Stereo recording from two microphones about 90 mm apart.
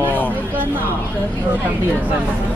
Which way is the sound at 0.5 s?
25° right (ahead or behind).